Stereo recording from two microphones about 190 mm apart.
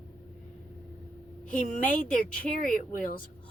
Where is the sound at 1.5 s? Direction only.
40° left (ahead or behind).